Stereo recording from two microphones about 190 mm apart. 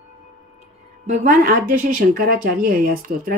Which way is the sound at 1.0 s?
40° right (ahead or behind).